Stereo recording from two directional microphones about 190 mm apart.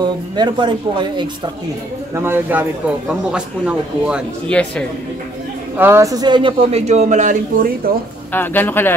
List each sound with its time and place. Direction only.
0.0 s speech: 25° right (ahead or behind)
2.1 s a man's voice: 10° right (ahead or behind); by 4.8 s 5° left (ahead or behind)
5.8 s a man's voice: 15° right (ahead or behind); by 7.9 s 45° right (ahead or behind)
8.3 s speech: 10° left (ahead or behind)